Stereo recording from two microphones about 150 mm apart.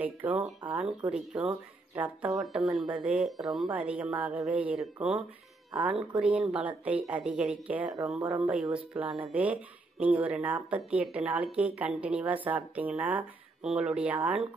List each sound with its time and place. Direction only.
0.0 s speech: 10° right (ahead or behind)